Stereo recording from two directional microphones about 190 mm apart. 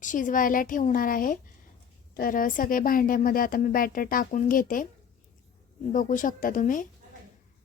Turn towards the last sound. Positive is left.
turn(degrees=45)  # may be behind; listen again after turning